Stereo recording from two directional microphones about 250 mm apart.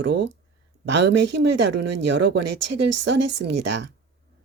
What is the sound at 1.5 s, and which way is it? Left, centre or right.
Speech, right.